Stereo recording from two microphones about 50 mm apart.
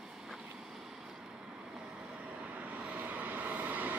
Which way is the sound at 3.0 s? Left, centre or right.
Right.